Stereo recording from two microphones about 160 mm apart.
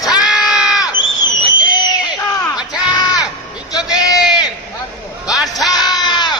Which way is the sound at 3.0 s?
25° left (ahead or behind).